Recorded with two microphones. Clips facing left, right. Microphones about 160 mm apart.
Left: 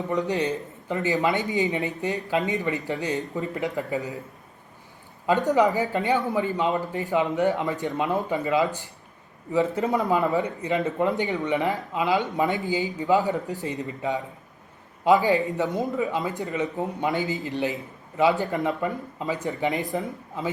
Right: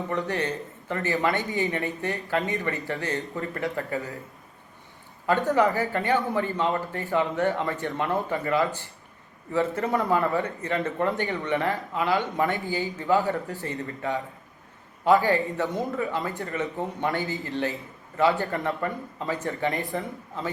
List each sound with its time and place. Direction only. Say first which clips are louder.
0.1 s speech: left 4 dB; 15° left (ahead or behind)
5.2 s speech: left 2 dB; 20° left (ahead or behind)